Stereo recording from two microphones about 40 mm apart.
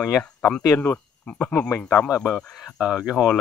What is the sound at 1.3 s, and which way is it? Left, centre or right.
Speech, left.